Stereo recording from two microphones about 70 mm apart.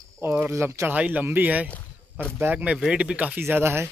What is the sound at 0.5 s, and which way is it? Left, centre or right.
Speech, right.